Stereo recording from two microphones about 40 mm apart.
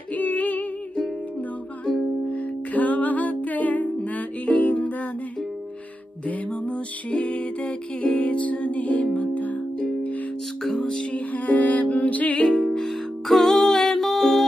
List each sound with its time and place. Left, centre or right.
0.1 s music: left
2.2 s music: left
6.2 s music: left
10.6 s music: centre
10.9 s music: left
11.1 s music: left
12.4 s music: centre